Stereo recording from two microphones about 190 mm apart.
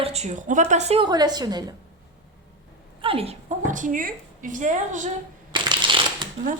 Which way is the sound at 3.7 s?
45° right (ahead or behind).